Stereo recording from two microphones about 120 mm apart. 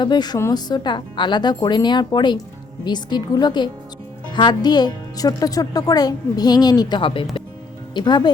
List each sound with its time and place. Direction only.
0.0 s speech: 35° left (ahead or behind)